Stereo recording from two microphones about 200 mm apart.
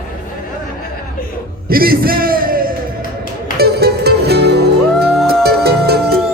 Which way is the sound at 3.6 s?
55° right (ahead or behind).